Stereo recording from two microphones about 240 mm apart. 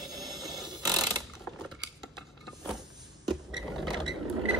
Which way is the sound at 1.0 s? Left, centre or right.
Centre.